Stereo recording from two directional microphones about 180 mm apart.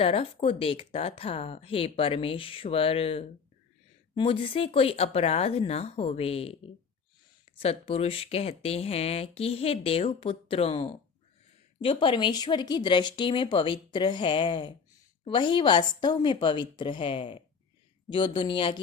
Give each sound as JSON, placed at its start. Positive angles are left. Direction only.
{"t": 0.0, "sound": "speech", "side_deg": 30}
{"t": 7.6, "sound": "speech", "side_deg": 35}